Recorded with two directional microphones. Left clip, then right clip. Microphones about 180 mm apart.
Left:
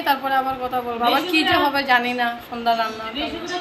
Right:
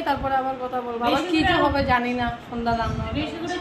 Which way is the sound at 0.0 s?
5° left (ahead or behind).